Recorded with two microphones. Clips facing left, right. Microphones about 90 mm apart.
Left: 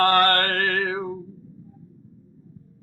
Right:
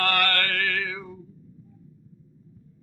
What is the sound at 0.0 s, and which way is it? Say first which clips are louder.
Music: left 7 dB; 35° left (ahead or behind).